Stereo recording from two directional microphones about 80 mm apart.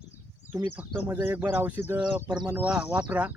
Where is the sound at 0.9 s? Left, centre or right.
Right.